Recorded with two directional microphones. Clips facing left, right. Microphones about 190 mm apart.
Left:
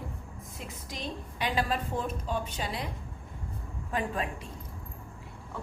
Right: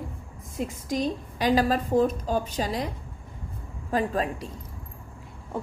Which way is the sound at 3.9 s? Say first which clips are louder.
Right 6 dB; 35° right (ahead or behind).